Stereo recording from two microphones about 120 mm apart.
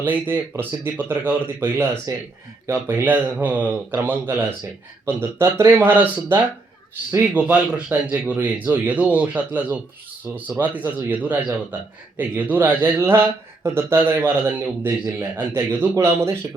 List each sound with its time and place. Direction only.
0.0 s a man's voice: 15° right (ahead or behind)